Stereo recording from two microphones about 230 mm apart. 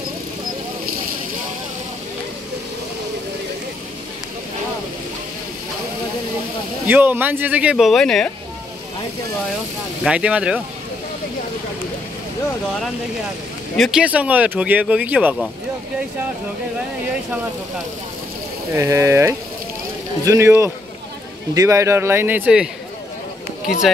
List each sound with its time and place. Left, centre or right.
6.9 s speech: centre
10.0 s speech: centre
13.7 s speech: centre
18.8 s speech: centre